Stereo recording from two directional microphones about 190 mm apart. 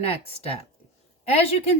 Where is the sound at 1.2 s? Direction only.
30° left (ahead or behind).